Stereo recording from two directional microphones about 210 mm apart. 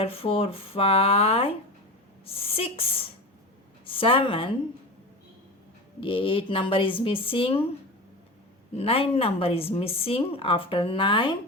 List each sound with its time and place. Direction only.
0.0 s speech: 25° left (ahead or behind)
6.0 s speech: 25° left (ahead or behind)
8.7 s speech: 30° left (ahead or behind)